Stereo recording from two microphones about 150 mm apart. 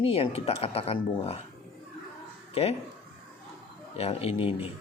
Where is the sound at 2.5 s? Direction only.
45° left (ahead or behind).